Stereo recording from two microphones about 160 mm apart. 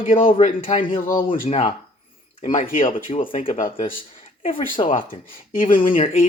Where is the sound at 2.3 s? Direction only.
50° left (ahead or behind).